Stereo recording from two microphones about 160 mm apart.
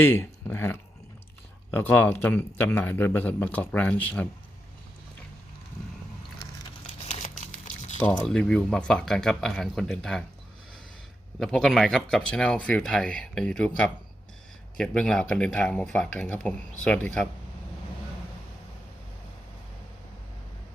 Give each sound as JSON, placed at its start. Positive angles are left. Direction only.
{"t": 0.0, "sound": "a man's voice", "side_deg": 15}
{"t": 6.8, "sound": "crumpling", "side_deg": 45}
{"t": 8.3, "sound": "speech", "side_deg": 5}
{"t": 11.3, "sound": "speech", "side_deg": 5}